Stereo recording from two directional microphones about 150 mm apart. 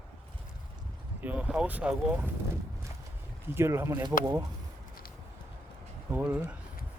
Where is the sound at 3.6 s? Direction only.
15° right (ahead or behind).